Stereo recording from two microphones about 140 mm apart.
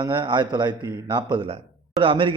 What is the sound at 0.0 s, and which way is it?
Speech, 35° right (ahead or behind).